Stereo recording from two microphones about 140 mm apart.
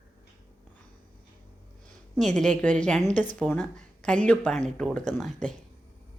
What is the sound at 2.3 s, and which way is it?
Speech, 5° left (ahead or behind).